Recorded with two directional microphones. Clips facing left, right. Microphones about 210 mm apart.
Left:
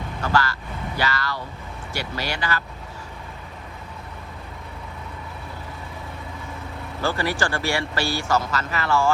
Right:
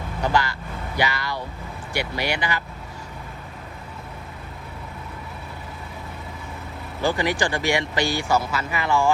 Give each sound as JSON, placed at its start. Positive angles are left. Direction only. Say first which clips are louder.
{"t": 0.2, "sound": "speech", "louder": "right 1 dB", "side_deg": -15}
{"t": 7.0, "sound": "speech", "louder": "right 2 dB", "side_deg": -15}